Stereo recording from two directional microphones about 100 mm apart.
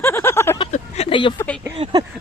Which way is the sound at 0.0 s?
25° left (ahead or behind).